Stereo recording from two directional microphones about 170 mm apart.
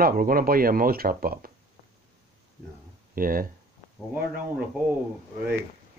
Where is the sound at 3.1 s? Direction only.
55° right (ahead or behind).